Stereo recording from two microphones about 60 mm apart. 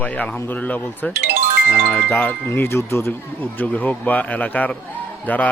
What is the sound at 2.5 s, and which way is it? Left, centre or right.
Speech, left.